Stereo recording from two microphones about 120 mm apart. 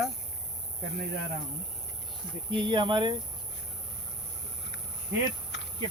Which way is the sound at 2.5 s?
40° right (ahead or behind).